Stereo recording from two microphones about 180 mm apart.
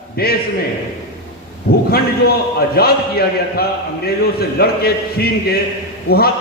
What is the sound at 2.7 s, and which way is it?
A man's voice, 60° left (ahead or behind).